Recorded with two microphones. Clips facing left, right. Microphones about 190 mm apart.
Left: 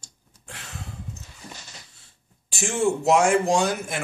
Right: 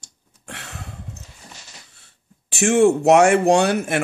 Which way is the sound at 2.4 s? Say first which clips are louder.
Right 8 dB; 70° right (ahead or behind).